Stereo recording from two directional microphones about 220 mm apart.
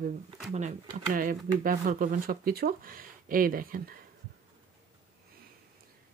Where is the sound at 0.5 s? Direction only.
30° right (ahead or behind).